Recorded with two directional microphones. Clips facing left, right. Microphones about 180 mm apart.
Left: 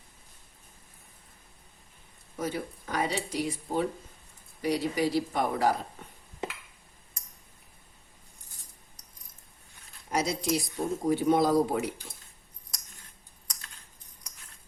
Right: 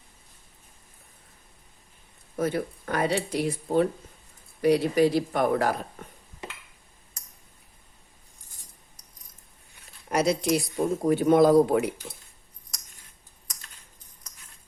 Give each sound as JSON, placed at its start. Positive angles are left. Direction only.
{"t": 2.3, "sound": "speech", "side_deg": -55}
{"t": 10.1, "sound": "speech", "side_deg": -60}